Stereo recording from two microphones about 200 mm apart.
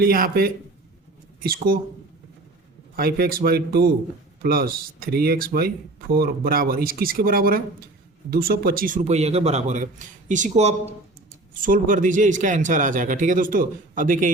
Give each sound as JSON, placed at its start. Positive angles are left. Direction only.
{"t": 0.0, "sound": "speech", "side_deg": -45}
{"t": 2.9, "sound": "speech", "side_deg": -50}